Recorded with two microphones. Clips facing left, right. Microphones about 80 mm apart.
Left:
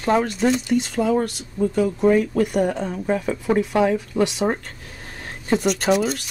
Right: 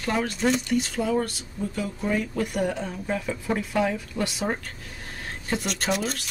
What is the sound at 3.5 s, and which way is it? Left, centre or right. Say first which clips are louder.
Speech: left 7 dB; left.